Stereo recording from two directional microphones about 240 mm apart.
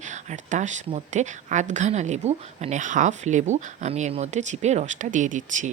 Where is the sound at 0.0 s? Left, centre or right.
Right.